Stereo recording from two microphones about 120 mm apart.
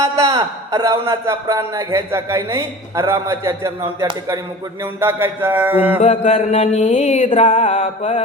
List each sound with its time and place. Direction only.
0.0 s a man's voice: 30° right (ahead or behind)
4.9 s mantra: 20° right (ahead or behind)
6.0 s mantra: 65° left (ahead or behind)